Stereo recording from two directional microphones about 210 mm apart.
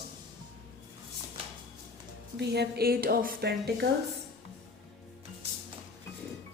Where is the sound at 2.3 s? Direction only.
50° right (ahead or behind).